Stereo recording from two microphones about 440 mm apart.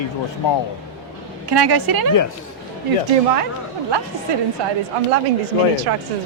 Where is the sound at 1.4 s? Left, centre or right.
Right.